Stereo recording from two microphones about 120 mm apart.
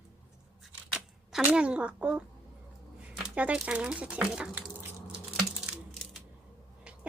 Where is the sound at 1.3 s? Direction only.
10° right (ahead or behind).